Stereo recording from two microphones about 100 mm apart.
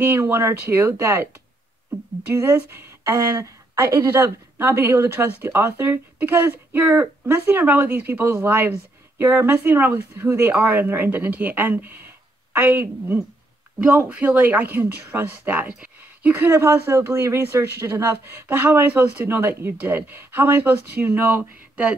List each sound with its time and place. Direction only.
0.0 s speech: 20° right (ahead or behind)
2.3 s speech: 30° right (ahead or behind)